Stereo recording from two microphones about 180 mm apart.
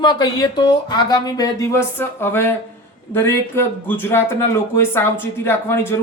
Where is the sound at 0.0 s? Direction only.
25° left (ahead or behind).